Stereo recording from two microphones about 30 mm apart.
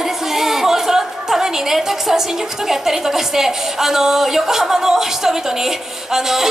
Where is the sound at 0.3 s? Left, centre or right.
Centre.